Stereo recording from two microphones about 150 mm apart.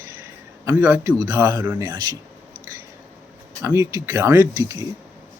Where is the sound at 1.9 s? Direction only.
30° right (ahead or behind).